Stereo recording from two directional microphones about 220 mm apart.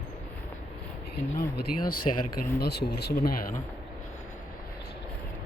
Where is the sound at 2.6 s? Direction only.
45° left (ahead or behind).